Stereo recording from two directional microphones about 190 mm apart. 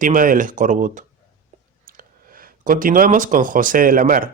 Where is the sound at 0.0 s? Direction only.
45° right (ahead or behind).